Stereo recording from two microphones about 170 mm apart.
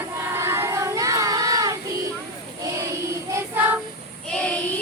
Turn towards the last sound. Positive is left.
turn(degrees=5)  # may be behind; listen again after turning